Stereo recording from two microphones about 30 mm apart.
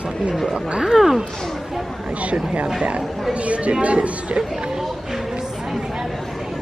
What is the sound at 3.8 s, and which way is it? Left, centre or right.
Speech, right.